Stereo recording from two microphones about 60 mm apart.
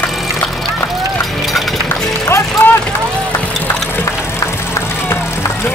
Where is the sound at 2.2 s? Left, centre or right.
Left.